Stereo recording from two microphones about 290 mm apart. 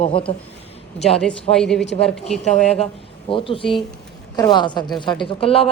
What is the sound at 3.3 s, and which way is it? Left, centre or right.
Speech, centre.